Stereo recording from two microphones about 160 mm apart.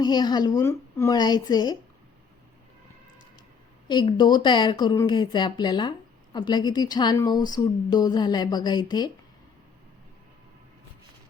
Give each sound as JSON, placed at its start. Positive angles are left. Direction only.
{"t": 0.0, "sound": "speech", "side_deg": 25}
{"t": 4.2, "sound": "speech", "side_deg": 25}